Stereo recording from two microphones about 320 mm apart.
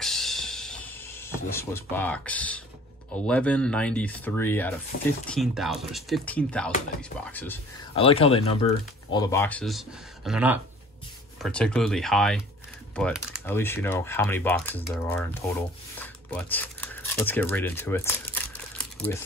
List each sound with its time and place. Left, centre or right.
0.0 s music: centre
1.3 s speech: centre
7.9 s speech: centre
16.0 s a sound: centre